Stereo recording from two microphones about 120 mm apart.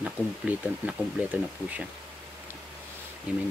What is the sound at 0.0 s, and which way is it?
Speech, 10° right (ahead or behind).